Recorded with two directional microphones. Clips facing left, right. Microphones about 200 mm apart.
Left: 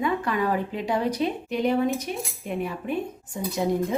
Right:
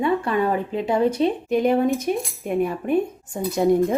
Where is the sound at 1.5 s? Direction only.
50° right (ahead or behind).